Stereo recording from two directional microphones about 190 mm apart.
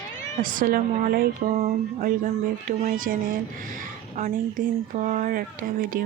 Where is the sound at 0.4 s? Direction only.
45° right (ahead or behind).